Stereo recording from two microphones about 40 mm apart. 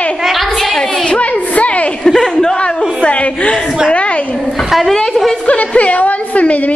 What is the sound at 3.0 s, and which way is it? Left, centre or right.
Chuckle, left.